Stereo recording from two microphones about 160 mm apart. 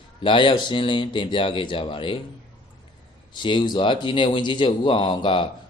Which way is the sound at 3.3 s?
30° left (ahead or behind).